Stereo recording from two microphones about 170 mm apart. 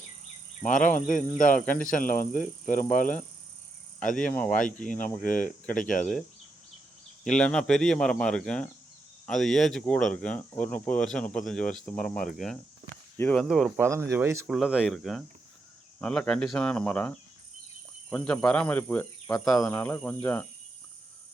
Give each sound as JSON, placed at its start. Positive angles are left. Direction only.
{"t": 0.6, "sound": "speech", "side_deg": 50}
{"t": 7.3, "sound": "speech", "side_deg": 5}
{"t": 14.4, "sound": "speech", "side_deg": 0}